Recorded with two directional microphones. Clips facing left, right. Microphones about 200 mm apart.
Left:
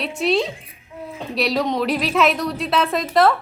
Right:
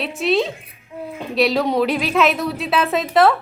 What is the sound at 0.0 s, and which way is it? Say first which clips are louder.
A woman's voice: right 1 dB; centre (ahead or behind).